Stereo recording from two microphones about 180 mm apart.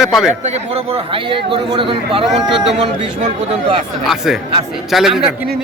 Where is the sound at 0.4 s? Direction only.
35° right (ahead or behind).